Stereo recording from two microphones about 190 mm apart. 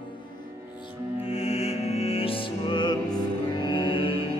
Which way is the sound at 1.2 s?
30° left (ahead or behind).